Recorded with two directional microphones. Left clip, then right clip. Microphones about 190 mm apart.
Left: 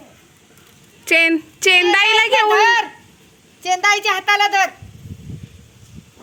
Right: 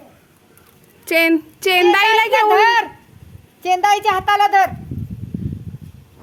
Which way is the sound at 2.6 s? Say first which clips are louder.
Even; 50° right (ahead or behind).